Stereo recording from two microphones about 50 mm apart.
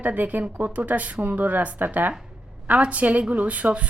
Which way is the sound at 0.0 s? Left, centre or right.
Right.